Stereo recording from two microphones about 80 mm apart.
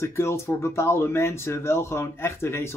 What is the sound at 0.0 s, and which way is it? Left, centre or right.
Speech, left.